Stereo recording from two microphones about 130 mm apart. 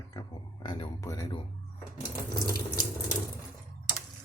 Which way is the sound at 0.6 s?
40° left (ahead or behind).